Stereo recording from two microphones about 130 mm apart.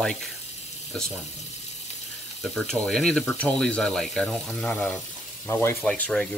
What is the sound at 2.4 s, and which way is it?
Speech, 5° left (ahead or behind).